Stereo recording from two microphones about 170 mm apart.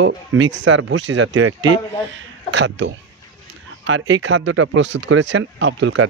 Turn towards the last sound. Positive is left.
turn(degrees=-90)